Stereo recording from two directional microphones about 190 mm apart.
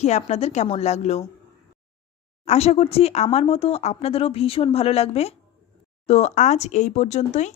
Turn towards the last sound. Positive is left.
turn(degrees=35)  # may be behind; listen again after turning